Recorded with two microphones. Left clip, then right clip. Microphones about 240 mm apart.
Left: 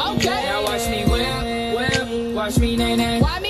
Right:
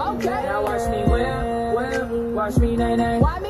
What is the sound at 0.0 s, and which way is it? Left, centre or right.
Music, left.